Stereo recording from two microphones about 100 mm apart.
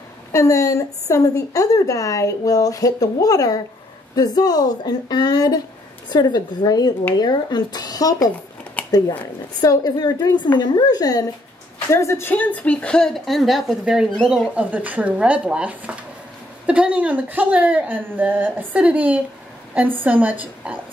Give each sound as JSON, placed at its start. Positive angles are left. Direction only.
{"t": 0.3, "sound": "a woman's voice", "side_deg": 30}
{"t": 8.8, "sound": "a sound", "side_deg": 15}
{"t": 9.6, "sound": "a woman's voice", "side_deg": 45}